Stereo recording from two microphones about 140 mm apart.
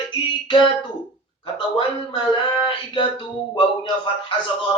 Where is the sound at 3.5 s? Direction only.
35° left (ahead or behind).